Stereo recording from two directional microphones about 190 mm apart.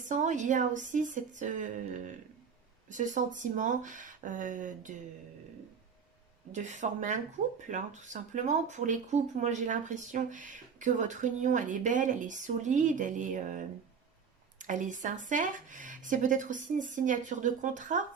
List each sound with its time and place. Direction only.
0.1 s speech: 40° right (ahead or behind)
6.5 s speech: 40° right (ahead or behind)